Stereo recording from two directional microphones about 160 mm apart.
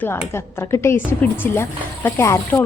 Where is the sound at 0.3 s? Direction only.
15° left (ahead or behind).